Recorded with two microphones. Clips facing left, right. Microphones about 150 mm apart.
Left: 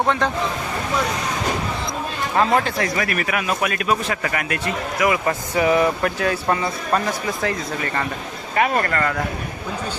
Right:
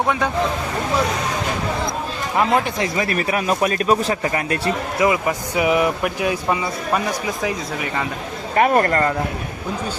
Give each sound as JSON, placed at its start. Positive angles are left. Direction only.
{"t": 2.4, "sound": "a man's voice", "side_deg": -15}
{"t": 5.2, "sound": "speech", "side_deg": -10}
{"t": 8.5, "sound": "speech", "side_deg": -40}